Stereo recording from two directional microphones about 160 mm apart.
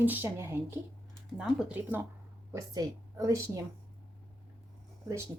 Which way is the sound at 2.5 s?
20° right (ahead or behind).